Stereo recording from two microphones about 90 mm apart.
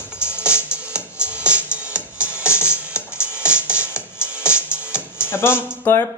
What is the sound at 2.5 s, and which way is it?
Music, 30° left (ahead or behind).